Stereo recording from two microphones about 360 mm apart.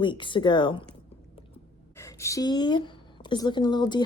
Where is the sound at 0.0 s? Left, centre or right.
Centre.